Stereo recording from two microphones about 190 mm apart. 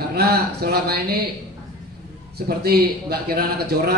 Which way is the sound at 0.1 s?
55° right (ahead or behind).